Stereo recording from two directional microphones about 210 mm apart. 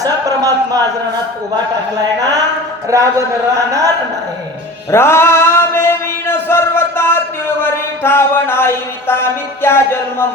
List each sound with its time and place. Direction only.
0.0 s a sound: 15° right (ahead or behind)
2.9 s a man's voice: 15° right (ahead or behind)
4.9 s male singing: 10° left (ahead or behind)